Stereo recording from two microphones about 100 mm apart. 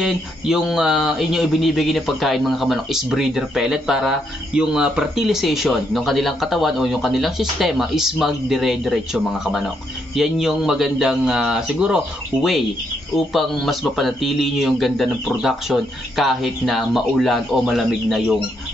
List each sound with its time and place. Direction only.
0.0 s speech: 5° right (ahead or behind)